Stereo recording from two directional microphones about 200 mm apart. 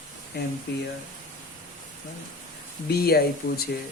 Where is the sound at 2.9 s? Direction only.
50° left (ahead or behind).